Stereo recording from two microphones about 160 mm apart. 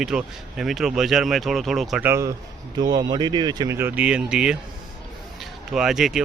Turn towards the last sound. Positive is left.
turn(degrees=-5)  # may be behind; listen again after turning